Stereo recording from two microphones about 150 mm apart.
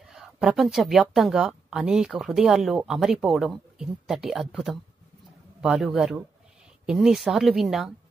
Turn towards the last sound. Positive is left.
turn(degrees=0)  # may be behind; listen again after turning